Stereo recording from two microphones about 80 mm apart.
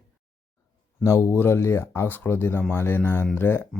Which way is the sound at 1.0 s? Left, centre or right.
Left.